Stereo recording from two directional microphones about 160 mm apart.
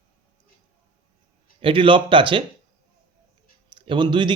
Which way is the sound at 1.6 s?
35° right (ahead or behind).